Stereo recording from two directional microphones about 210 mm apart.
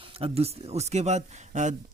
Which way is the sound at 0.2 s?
30° right (ahead or behind).